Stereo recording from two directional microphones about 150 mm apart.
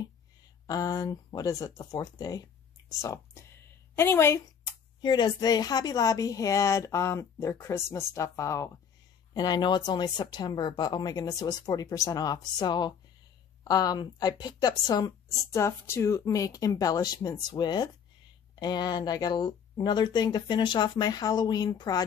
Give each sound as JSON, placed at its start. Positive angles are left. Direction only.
{"t": 0.7, "sound": "speech", "side_deg": 25}
{"t": 5.0, "sound": "a woman's voice", "side_deg": 30}